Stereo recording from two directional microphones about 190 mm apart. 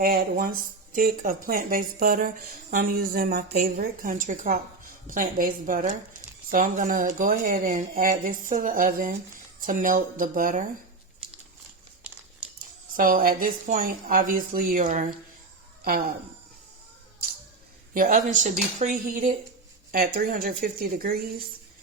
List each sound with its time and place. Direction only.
0.0 s a woman's voice: 50° right (ahead or behind)
13.0 s a woman's voice: 45° right (ahead or behind)
17.9 s a woman's voice: 45° right (ahead or behind)